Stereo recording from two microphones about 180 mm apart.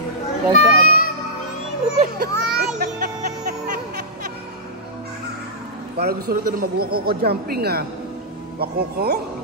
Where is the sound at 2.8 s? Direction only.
60° right (ahead or behind).